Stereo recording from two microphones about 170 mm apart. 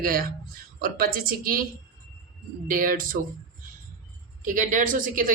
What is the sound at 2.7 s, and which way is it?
Speech, 50° right (ahead or behind).